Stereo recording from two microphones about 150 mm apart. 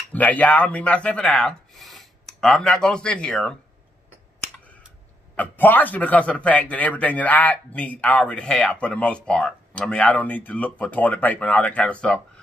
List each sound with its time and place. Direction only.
0.1 s speech: 10° left (ahead or behind)
5.3 s a man's voice: 10° left (ahead or behind)